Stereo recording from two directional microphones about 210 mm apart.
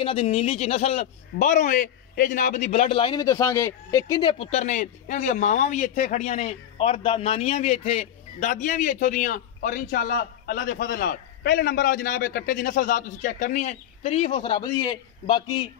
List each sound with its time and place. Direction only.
0.0 s a man's voice: 25° left (ahead or behind)